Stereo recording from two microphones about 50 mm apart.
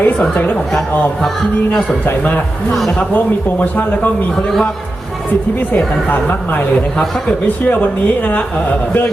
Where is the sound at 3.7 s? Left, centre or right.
Left.